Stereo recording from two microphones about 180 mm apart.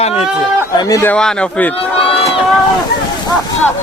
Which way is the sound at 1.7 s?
35° left (ahead or behind).